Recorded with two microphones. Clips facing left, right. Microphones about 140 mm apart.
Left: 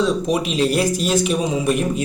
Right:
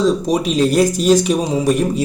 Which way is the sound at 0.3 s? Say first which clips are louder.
Right 3 dB; 40° right (ahead or behind).